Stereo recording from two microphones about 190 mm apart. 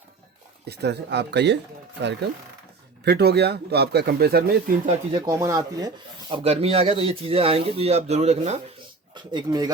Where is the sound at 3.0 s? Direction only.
60° right (ahead or behind).